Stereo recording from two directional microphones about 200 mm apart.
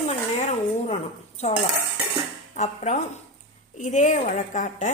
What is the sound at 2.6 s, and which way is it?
A woman's voice, 35° left (ahead or behind).